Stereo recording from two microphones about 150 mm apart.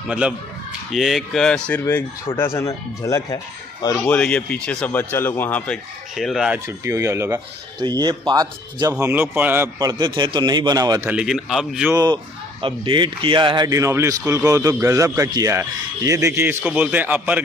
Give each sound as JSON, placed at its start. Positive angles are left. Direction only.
{"t": 0.9, "sound": "speech", "side_deg": 0}
{"t": 1.9, "sound": "speech", "side_deg": 20}
{"t": 3.9, "sound": "speech", "side_deg": 10}
{"t": 6.1, "sound": "speech", "side_deg": 0}
{"t": 6.8, "sound": "speech", "side_deg": -20}
{"t": 9.0, "sound": "speech", "side_deg": -15}
{"t": 11.1, "sound": "speech", "side_deg": -5}
{"t": 11.9, "sound": "speech", "side_deg": -25}